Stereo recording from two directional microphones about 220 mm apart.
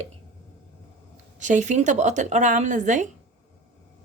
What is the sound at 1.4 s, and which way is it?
A woman's voice, 35° right (ahead or behind).